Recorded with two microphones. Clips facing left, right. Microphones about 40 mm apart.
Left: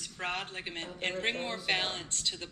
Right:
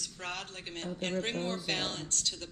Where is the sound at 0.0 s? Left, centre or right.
Left.